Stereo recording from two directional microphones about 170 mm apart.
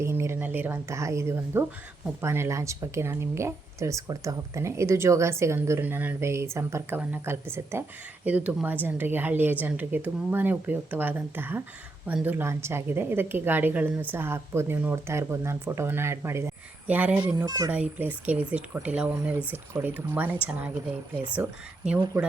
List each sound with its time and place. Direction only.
0.0 s a woman's voice: 15° right (ahead or behind)
17.4 s a child's voice: 20° right (ahead or behind)
17.7 s speech: 10° right (ahead or behind)